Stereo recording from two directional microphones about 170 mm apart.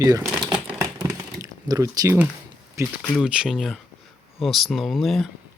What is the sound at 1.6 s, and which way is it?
Speech, 20° right (ahead or behind).